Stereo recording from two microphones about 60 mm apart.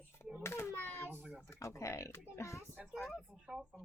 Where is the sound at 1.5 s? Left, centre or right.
Left.